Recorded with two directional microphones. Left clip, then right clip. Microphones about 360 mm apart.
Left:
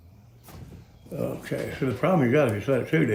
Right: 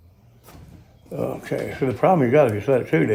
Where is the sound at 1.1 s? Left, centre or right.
Centre.